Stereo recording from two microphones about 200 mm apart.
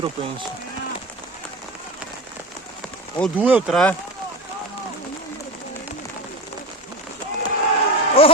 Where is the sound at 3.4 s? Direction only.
5° right (ahead or behind).